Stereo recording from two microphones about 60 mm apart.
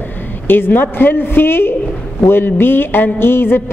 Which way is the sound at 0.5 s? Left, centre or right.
Left.